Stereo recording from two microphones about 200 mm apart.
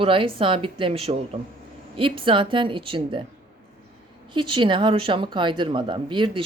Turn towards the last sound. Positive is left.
turn(degrees=-25)  # may be behind; listen again after turning